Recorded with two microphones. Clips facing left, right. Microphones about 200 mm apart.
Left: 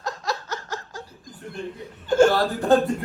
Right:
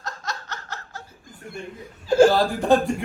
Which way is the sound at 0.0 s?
Centre (ahead or behind).